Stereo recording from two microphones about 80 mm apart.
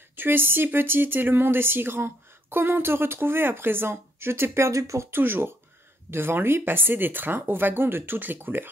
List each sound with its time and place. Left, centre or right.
0.1 s speech: right
5.1 s speech: right